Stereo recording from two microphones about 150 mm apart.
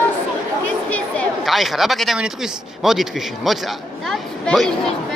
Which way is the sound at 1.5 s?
Centre (ahead or behind).